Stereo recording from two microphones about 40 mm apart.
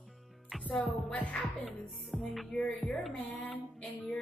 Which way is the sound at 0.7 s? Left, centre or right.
Left.